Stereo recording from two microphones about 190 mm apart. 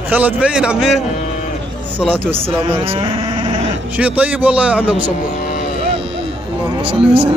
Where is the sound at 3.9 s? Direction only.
10° right (ahead or behind).